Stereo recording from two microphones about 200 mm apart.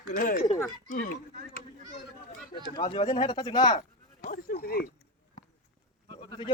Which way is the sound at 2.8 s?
25° left (ahead or behind).